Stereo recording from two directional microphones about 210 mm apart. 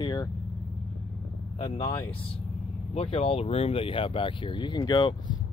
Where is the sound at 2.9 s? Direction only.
30° left (ahead or behind).